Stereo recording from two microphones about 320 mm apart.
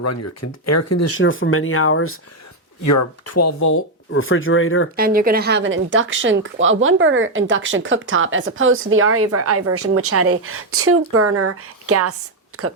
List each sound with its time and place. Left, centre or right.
0.0 s speech: left
2.8 s speech: left
4.1 s speech: left
4.9 s speech: right